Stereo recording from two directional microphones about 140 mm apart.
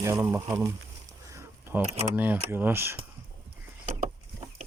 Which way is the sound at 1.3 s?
20° right (ahead or behind).